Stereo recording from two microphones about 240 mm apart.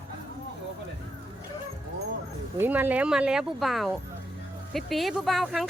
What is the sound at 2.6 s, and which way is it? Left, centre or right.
Speech, centre.